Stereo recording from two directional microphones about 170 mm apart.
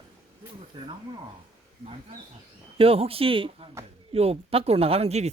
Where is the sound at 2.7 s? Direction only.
35° right (ahead or behind).